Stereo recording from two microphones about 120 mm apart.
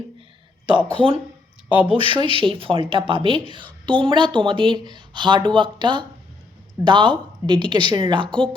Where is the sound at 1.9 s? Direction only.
45° right (ahead or behind).